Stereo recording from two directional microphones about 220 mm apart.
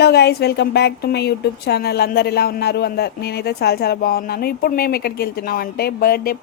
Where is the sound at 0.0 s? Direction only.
50° left (ahead or behind).